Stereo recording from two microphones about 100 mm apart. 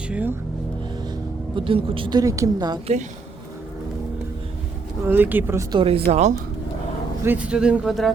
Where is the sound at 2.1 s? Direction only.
35° right (ahead or behind).